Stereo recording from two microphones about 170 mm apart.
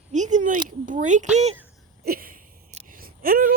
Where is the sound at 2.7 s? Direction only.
45° right (ahead or behind).